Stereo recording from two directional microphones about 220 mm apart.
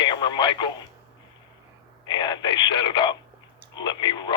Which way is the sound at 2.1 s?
20° left (ahead or behind).